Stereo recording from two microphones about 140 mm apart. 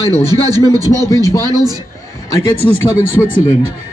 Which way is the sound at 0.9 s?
25° left (ahead or behind).